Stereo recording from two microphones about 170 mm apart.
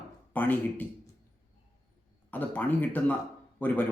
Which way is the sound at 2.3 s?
10° left (ahead or behind).